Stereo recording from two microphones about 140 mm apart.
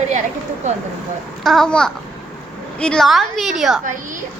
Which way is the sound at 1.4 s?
5° left (ahead or behind).